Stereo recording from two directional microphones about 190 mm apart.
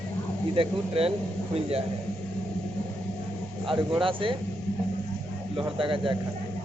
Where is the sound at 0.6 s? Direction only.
30° right (ahead or behind).